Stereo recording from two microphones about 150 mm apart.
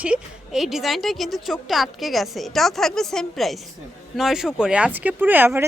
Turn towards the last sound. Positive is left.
turn(degrees=-15)  # may be behind; listen again after turning